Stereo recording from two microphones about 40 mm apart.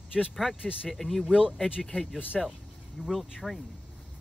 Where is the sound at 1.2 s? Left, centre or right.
Centre.